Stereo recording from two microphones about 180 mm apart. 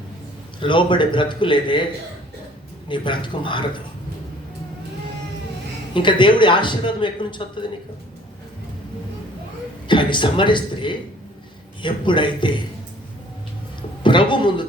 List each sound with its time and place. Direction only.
0.6 s a man's voice: 25° left (ahead or behind)
2.9 s a man's voice: 25° left (ahead or behind)
5.9 s a man's voice: 25° left (ahead or behind)
9.8 s a man's voice: 25° left (ahead or behind)
14.0 s speech: 25° left (ahead or behind)